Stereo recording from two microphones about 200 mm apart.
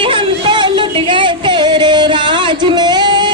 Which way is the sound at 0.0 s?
25° right (ahead or behind).